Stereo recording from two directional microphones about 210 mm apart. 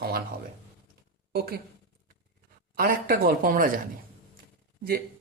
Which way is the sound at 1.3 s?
50° right (ahead or behind).